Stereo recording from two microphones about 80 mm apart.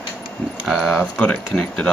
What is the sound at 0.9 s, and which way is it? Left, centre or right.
Speech, left.